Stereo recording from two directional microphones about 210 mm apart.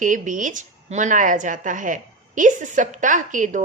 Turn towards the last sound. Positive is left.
turn(degrees=-35)  # may be behind; listen again after turning